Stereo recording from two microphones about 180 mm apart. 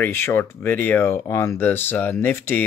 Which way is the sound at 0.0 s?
15° left (ahead or behind).